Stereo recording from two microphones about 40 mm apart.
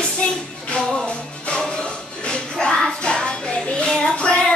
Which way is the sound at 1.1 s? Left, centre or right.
Left.